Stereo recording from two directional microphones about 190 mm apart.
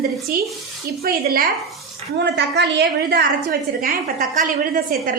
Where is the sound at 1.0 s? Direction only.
50° right (ahead or behind).